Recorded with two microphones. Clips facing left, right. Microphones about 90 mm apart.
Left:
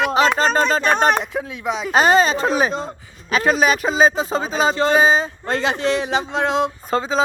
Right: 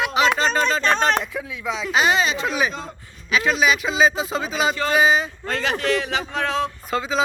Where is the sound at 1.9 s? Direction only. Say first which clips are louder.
Left 5 dB; 45° left (ahead or behind).